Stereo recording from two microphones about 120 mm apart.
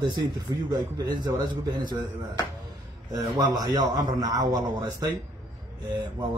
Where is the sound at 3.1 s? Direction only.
35° right (ahead or behind).